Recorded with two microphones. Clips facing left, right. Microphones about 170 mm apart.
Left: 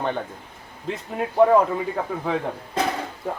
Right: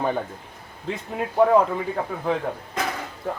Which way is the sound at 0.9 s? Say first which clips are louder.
Left 1 dB; centre (ahead or behind).